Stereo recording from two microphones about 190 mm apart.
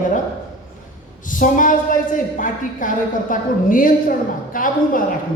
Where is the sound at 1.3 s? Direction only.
45° left (ahead or behind).